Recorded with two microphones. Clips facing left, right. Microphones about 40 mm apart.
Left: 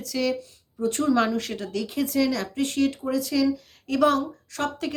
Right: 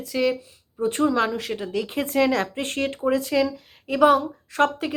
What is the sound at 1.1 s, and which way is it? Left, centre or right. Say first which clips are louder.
Speech: left 1 dB; centre.